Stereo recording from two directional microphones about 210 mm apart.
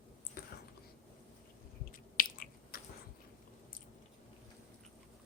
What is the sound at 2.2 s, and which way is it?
Biting, 45° left (ahead or behind).